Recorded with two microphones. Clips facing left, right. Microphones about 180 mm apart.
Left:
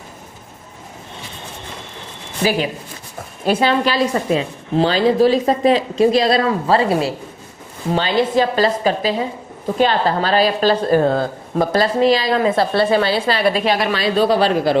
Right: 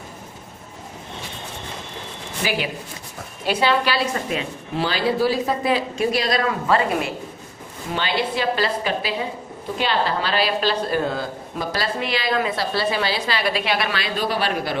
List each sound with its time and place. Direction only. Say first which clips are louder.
2.4 s a woman's voice: left 6 dB; 35° left (ahead or behind)
11.9 s a woman's voice: left 8 dB; 40° left (ahead or behind)
12.5 s a woman's voice: left 8 dB; 55° left (ahead or behind); by 14.5 s 25° left (ahead or behind)